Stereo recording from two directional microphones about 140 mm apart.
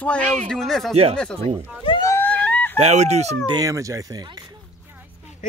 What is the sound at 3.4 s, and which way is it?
Speech, 25° right (ahead or behind).